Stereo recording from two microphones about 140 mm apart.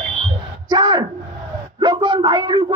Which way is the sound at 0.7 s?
30° right (ahead or behind).